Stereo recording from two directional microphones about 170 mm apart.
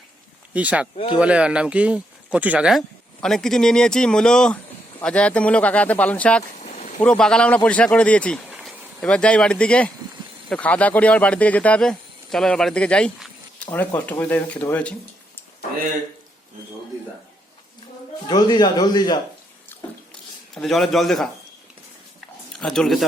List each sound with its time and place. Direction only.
0.5 s speech: 10° right (ahead or behind)
0.9 s a man's voice: 25° left (ahead or behind)
1.2 s speech: 5° right (ahead or behind)
6.5 s a sound: 45° left (ahead or behind)
7.0 s speech: 5° left (ahead or behind)
8.5 s a sound: 10° right (ahead or behind)
9.0 s speech: 5° left (ahead or behind)
18.3 s a man's voice: 25° left (ahead or behind)
20.6 s speech: centre (ahead or behind)
22.6 s speech: centre (ahead or behind)